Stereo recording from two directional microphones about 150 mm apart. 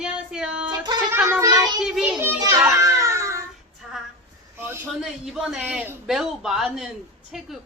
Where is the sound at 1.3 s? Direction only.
20° right (ahead or behind).